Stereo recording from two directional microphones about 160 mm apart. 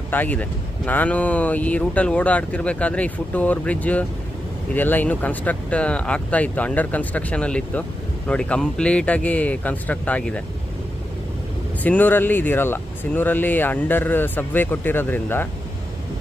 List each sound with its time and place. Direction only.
0.1 s speech: 10° left (ahead or behind)
11.8 s speech: 10° left (ahead or behind)